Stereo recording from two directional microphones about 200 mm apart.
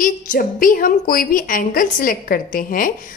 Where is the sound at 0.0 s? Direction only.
45° left (ahead or behind).